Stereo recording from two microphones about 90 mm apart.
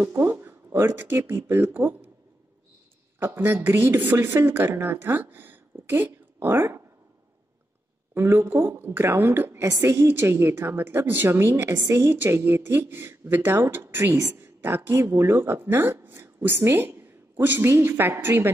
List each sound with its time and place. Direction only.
0.0 s speech: 30° right (ahead or behind)
3.2 s a woman's voice: 25° right (ahead or behind)
8.1 s a woman's voice: 25° right (ahead or behind)